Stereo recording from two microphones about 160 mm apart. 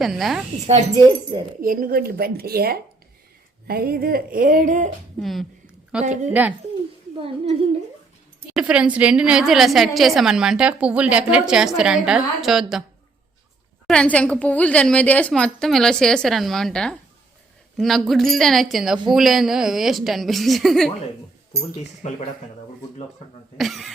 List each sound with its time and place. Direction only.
0.0 s a woman's voice: centre (ahead or behind)
1.6 s a woman's voice: 60° right (ahead or behind)
3.7 s a sound: 70° right (ahead or behind); by 4.9 s 50° right (ahead or behind)
5.2 s a woman's voice: centre (ahead or behind)
8.5 s a woman's voice: 5° right (ahead or behind)
13.8 s a woman's voice: 5° left (ahead or behind)
23.6 s a woman's voice: centre (ahead or behind)